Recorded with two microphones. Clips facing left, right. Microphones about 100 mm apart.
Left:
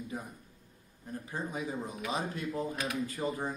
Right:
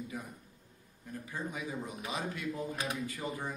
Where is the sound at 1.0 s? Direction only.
35° left (ahead or behind).